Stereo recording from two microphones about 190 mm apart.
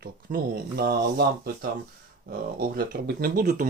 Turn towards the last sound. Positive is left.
turn(degrees=-45)  # may be behind; listen again after turning